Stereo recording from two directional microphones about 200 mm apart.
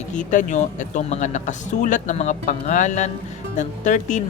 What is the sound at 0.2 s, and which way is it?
Speech, 40° left (ahead or behind).